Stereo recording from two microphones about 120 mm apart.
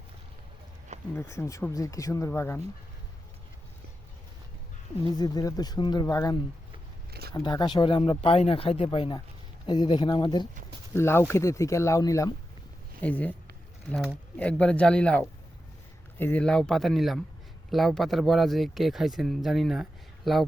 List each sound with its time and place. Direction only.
1.1 s speech: 20° left (ahead or behind)
5.1 s speech: 35° left (ahead or behind)
10.9 s speech: 20° left (ahead or behind)
13.0 s speech: 10° left (ahead or behind)